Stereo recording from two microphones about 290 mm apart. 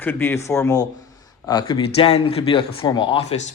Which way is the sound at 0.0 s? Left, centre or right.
Centre.